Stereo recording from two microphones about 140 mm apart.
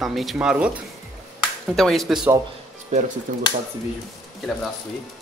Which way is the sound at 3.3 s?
70° right (ahead or behind).